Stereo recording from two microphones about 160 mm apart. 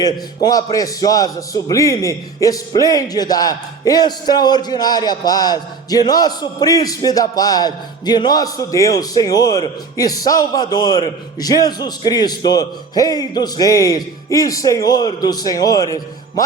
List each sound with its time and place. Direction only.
0.0 s a man's voice: 25° left (ahead or behind)